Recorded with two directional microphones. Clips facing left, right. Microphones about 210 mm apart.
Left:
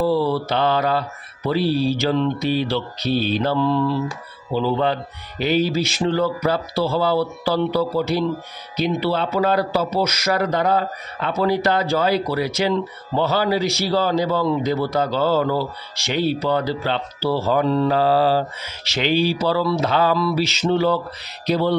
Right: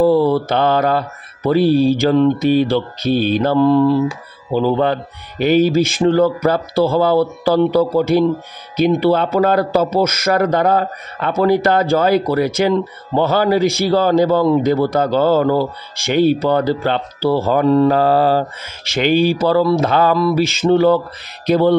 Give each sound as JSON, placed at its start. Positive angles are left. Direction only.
{"t": 0.0, "sound": "a man's voice", "side_deg": -50}